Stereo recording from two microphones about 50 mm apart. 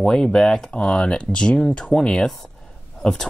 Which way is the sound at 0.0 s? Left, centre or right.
Centre.